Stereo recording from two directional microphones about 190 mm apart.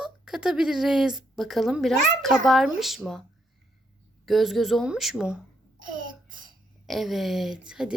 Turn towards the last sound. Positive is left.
turn(degrees=-5)  # may be behind; listen again after turning